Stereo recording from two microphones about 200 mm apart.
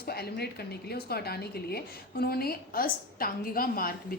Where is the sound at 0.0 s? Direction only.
50° left (ahead or behind).